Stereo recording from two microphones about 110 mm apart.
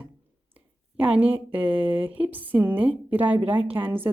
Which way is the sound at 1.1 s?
15° right (ahead or behind).